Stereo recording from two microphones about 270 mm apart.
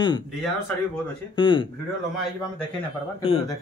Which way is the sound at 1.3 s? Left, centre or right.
Centre.